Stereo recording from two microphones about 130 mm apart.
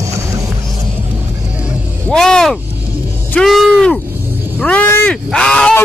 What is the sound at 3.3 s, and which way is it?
Music, centre (ahead or behind).